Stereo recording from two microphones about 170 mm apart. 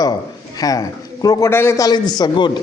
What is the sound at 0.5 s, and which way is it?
A man's voice, 20° left (ahead or behind).